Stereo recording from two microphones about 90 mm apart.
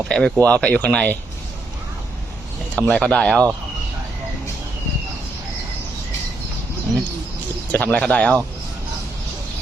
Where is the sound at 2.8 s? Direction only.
10° left (ahead or behind).